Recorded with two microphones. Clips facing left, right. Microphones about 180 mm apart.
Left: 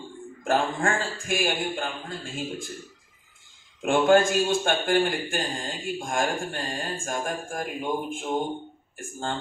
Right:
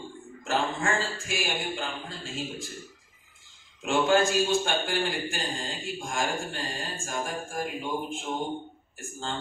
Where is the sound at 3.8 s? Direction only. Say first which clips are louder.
Left 4 dB; 50° left (ahead or behind).